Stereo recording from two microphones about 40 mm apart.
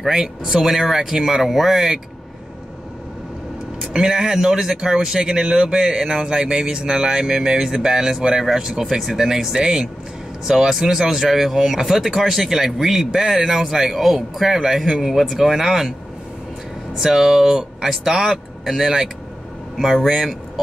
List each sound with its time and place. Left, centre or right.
0.0 s speech: centre
3.9 s speech: centre
17.0 s speech: centre